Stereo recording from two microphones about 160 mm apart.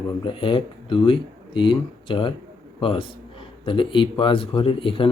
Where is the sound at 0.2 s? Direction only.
30° left (ahead or behind).